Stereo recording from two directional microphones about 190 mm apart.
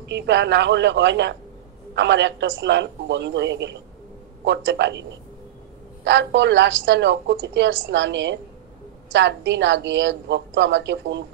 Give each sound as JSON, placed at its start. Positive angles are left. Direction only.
{"t": 0.0, "sound": "a woman's voice", "side_deg": -65}
{"t": 6.0, "sound": "a woman's voice", "side_deg": -70}